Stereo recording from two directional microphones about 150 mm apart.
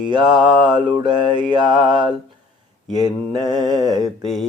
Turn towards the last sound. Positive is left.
turn(degrees=0)  # may be behind; listen again after turning